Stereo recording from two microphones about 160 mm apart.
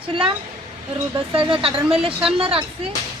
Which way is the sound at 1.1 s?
35° right (ahead or behind).